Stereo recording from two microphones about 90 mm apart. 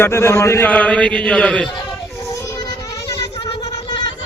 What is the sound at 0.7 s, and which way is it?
Speech, 15° left (ahead or behind).